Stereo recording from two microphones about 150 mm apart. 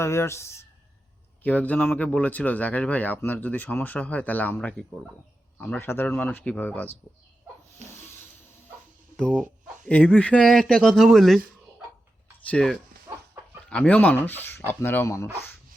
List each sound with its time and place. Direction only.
0.0 s speech: 20° left (ahead or behind)
7.8 s a sound: 50° right (ahead or behind)
9.1 s speech: 5° left (ahead or behind)
12.5 s speech: 5° left (ahead or behind)